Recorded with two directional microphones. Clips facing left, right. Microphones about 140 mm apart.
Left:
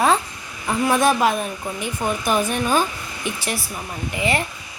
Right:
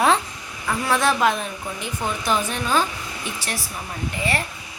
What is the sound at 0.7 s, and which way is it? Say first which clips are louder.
Speech: left 3 dB; 15° left (ahead or behind).